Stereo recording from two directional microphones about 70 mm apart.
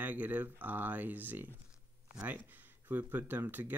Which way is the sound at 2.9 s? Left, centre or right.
Right.